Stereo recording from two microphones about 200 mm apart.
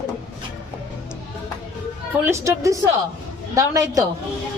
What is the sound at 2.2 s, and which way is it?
A woman's voice, 15° right (ahead or behind).